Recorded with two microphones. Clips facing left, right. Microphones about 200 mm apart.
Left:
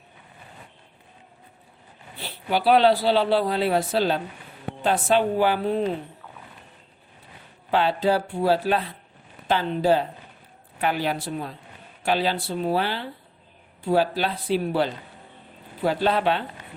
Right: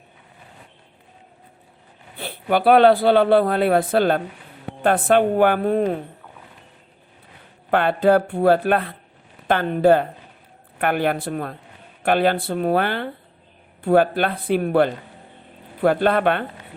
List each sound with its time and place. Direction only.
2.1 s speech: 55° right (ahead or behind)
7.7 s speech: 55° right (ahead or behind)